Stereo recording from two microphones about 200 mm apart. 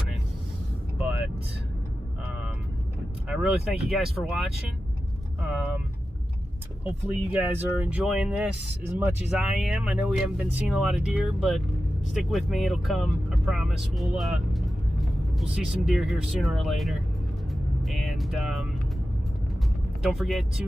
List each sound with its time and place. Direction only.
0.9 s vehicle: 5° right (ahead or behind)
3.2 s speech: centre (ahead or behind)
7.3 s speech: 5° right (ahead or behind)
17.5 s music: centre (ahead or behind)
20.0 s speech: centre (ahead or behind)